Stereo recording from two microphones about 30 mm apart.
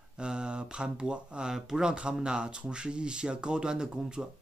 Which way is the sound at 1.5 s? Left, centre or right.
Right.